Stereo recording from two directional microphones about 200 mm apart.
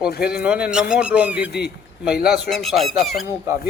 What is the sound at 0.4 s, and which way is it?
Speech, 5° right (ahead or behind).